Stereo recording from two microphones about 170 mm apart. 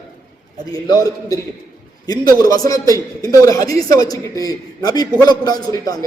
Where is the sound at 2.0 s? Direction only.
25° left (ahead or behind).